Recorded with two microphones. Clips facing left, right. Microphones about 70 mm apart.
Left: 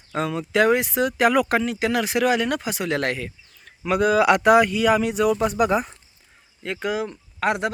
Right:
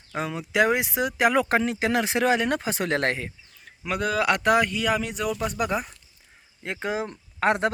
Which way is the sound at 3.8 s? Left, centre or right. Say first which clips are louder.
Left 7 dB; centre.